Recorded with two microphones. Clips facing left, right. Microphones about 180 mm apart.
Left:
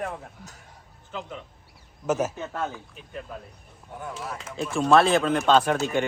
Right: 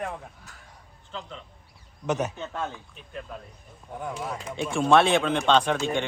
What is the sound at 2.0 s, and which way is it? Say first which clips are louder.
Speech: left 2 dB; 5° left (ahead or behind).